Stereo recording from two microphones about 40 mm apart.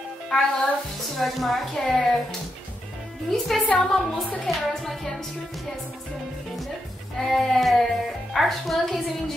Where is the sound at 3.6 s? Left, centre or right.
Left.